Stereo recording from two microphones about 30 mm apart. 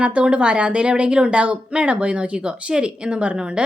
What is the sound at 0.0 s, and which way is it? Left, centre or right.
Speech, right.